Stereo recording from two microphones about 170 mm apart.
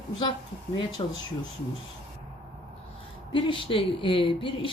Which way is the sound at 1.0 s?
25° left (ahead or behind).